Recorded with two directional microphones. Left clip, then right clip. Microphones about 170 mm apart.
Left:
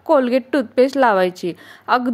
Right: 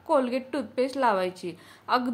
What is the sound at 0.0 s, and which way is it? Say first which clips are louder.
A woman's voice: left 9 dB; 40° left (ahead or behind).